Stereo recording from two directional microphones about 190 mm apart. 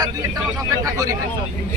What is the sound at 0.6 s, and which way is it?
Speech, 20° right (ahead or behind).